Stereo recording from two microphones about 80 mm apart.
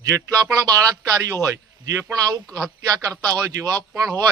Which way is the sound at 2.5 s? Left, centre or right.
Right.